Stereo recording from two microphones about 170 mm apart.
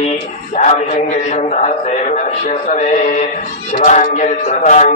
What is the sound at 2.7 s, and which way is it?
A man's voice, 40° left (ahead or behind).